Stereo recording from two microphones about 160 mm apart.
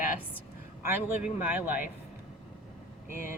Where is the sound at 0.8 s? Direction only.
15° right (ahead or behind).